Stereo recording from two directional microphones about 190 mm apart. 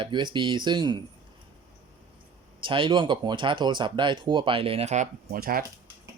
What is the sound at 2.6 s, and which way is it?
Speech, 25° right (ahead or behind).